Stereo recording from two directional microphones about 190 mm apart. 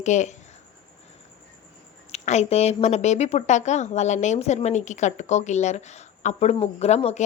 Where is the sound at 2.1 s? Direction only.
35° left (ahead or behind).